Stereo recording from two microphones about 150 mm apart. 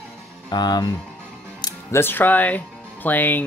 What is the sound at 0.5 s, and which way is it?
Speech, 30° left (ahead or behind).